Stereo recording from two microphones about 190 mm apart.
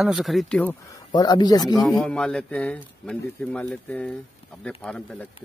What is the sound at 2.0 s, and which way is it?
Speech, 5° left (ahead or behind).